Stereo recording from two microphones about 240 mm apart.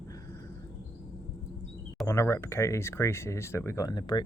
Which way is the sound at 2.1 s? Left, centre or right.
Centre.